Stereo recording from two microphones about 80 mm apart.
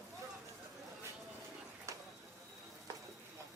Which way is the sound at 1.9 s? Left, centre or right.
Right.